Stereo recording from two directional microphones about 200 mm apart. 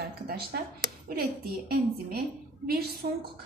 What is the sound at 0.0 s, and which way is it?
A woman's voice, 50° right (ahead or behind).